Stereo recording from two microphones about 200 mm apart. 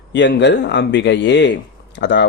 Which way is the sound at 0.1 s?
60° left (ahead or behind).